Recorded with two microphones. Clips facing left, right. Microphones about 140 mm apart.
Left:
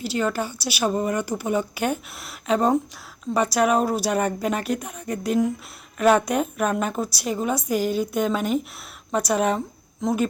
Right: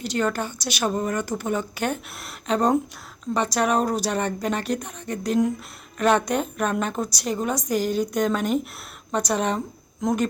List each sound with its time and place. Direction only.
0.0 s a woman's voice: 5° left (ahead or behind)